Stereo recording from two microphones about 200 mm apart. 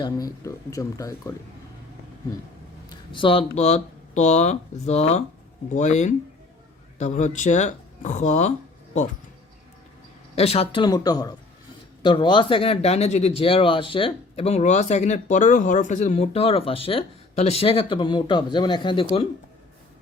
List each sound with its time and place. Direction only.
0.0 s speech: 20° left (ahead or behind)
2.9 s speech: 25° left (ahead or behind)
10.3 s speech: 30° left (ahead or behind)